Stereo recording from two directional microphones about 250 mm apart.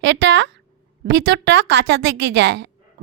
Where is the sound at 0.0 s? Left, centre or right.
Right.